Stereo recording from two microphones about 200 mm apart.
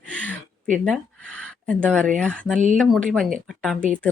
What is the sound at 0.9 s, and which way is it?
Speech, 5° left (ahead or behind).